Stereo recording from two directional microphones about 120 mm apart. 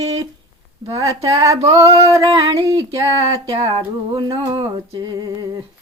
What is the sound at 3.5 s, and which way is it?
Female singing, 35° right (ahead or behind).